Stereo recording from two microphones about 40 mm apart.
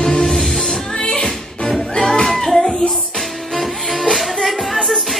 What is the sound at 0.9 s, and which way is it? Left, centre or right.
Music, centre.